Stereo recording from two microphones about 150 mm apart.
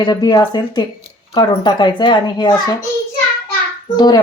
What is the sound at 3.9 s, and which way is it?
Speech, 30° left (ahead or behind).